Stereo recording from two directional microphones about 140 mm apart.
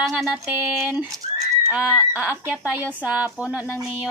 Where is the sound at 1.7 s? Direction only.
5° right (ahead or behind).